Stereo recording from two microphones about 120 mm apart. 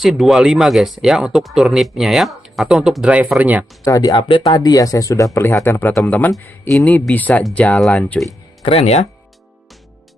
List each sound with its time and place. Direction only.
0.0 s speech: centre (ahead or behind)
3.8 s speech: 30° left (ahead or behind)
4.1 s speech: 45° left (ahead or behind)
4.4 s speech: 35° left (ahead or behind); by 8.2 s 10° left (ahead or behind)
8.6 s speech: 60° left (ahead or behind)